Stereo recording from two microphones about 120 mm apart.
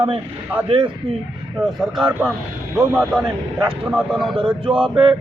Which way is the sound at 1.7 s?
Centre (ahead or behind).